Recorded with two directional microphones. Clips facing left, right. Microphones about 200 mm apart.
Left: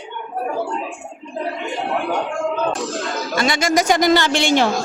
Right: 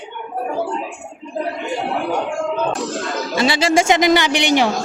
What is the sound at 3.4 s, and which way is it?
Speech, 30° right (ahead or behind).